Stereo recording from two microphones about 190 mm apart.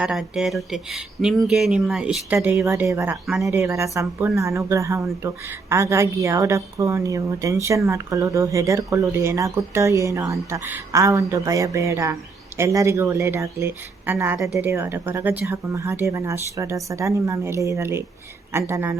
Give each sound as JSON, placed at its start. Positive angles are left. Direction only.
{"t": 0.0, "sound": "a woman's voice", "side_deg": 0}